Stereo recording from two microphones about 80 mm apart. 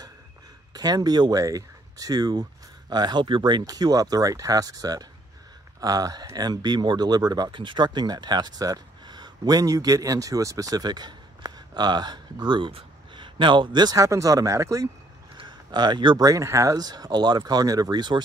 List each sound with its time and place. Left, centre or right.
0.7 s speech: right
1.4 s speech: right
3.6 s speech: right
13.9 s speech: right
15.3 s a sound: right
16.2 s speech: right